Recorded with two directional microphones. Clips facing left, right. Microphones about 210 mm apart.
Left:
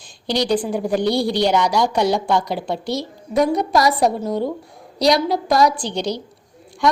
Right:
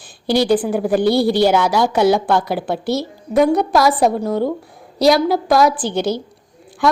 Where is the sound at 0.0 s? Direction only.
5° right (ahead or behind).